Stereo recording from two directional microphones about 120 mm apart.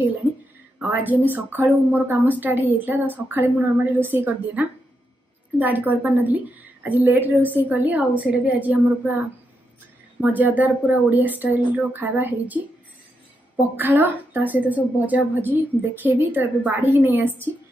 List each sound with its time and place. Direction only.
0.7 s a woman's voice: 15° right (ahead or behind)
10.2 s a woman's voice: 15° right (ahead or behind)
13.7 s a woman's voice: 15° right (ahead or behind)